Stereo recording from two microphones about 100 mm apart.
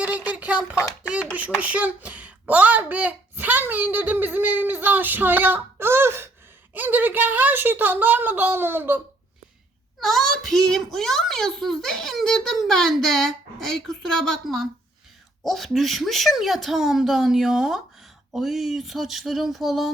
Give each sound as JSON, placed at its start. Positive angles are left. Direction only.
{"t": 0.0, "sound": "a sound", "side_deg": -15}
{"t": 1.1, "sound": "a child's voice", "side_deg": -15}
{"t": 10.0, "sound": "a child's voice", "side_deg": 5}